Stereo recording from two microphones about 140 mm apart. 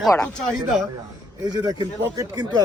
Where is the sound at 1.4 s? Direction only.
30° right (ahead or behind).